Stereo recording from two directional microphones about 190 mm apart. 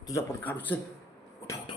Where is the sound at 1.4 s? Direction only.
15° left (ahead or behind).